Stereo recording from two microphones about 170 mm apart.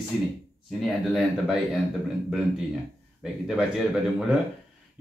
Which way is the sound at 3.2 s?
5° right (ahead or behind).